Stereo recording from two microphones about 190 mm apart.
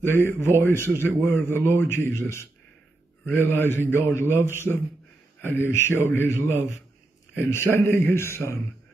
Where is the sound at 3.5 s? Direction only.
10° left (ahead or behind).